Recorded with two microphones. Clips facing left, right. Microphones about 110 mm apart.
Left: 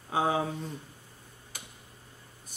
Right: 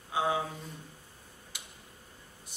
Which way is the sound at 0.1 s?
40° left (ahead or behind).